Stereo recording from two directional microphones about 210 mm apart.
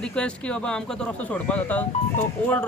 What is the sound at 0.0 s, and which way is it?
Speech, 5° left (ahead or behind).